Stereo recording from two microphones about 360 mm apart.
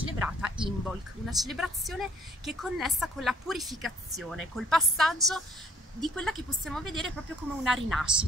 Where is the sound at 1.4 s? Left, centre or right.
Centre.